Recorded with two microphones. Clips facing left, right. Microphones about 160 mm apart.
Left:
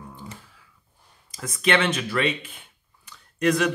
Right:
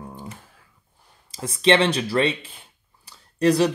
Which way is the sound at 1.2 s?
30° right (ahead or behind).